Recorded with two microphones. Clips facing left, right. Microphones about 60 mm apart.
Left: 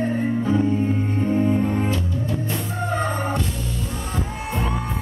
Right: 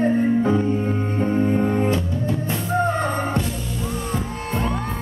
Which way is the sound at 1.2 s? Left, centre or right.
Right.